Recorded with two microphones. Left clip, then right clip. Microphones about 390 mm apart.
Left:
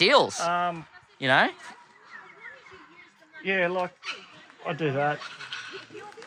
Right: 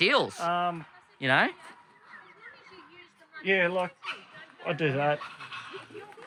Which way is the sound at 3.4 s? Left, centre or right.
Centre.